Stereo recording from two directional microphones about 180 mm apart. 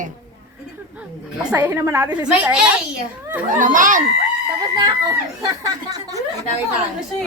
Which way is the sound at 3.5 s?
45° right (ahead or behind).